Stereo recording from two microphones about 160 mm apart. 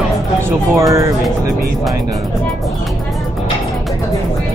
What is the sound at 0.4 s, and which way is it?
Speech, 20° right (ahead or behind).